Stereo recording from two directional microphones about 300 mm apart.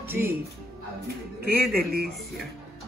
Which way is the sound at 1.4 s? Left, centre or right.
Right.